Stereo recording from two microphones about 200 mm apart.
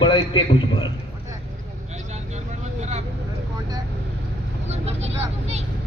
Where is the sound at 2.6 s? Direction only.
35° right (ahead or behind).